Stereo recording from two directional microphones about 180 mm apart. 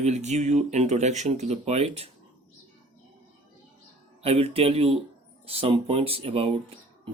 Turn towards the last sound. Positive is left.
turn(degrees=-30)  # may be behind; listen again after turning